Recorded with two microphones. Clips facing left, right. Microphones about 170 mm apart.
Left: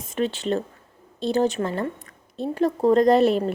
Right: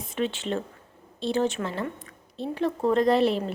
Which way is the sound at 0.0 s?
45° left (ahead or behind).